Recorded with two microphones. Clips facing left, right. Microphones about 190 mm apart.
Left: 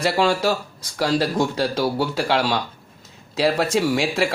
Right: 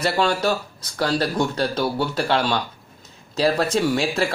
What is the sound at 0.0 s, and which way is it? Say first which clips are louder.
Speech: left 1 dB; 10° left (ahead or behind).